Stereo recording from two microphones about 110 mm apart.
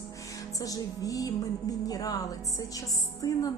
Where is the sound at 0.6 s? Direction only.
30° left (ahead or behind).